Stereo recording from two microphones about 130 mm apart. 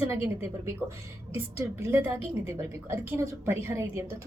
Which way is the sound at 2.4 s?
20° right (ahead or behind).